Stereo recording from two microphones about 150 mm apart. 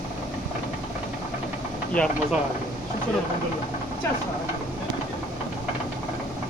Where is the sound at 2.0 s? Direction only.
10° left (ahead or behind).